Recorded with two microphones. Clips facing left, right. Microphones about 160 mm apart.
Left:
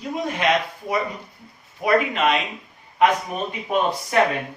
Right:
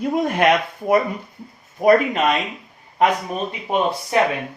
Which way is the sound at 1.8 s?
40° right (ahead or behind).